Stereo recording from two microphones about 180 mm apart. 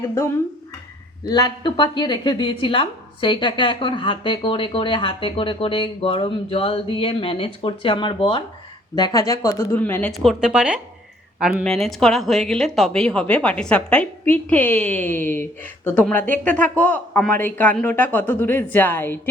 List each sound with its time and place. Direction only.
1.2 s speech: 20° left (ahead or behind)
10.1 s a woman's voice: centre (ahead or behind)